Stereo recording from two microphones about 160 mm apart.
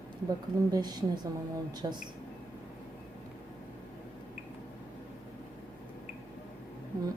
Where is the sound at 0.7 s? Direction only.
25° right (ahead or behind).